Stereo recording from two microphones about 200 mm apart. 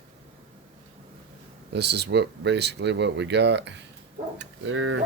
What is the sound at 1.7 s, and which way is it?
Speech, 55° right (ahead or behind).